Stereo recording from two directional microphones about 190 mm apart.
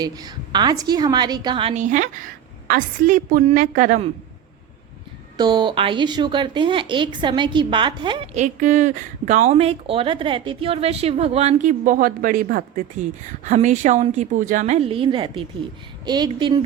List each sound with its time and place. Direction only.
0.0 s a woman's voice: 20° right (ahead or behind); by 4.1 s 40° right (ahead or behind)
5.4 s a woman's voice: 25° right (ahead or behind)